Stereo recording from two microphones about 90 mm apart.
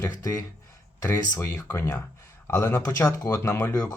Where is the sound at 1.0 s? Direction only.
30° left (ahead or behind).